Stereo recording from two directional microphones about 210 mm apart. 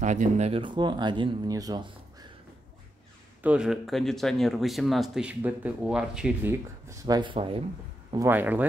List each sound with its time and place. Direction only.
0.0 s speech: 35° right (ahead or behind); by 1.9 s 15° right (ahead or behind)
3.4 s speech: 5° right (ahead or behind); by 7.6 s 25° right (ahead or behind)
8.1 s speech: 10° right (ahead or behind)